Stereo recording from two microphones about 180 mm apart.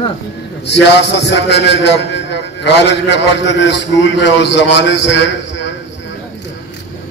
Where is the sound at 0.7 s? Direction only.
70° left (ahead or behind).